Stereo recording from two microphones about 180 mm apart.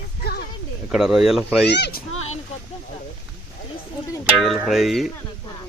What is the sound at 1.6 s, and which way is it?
Speech, 70° left (ahead or behind).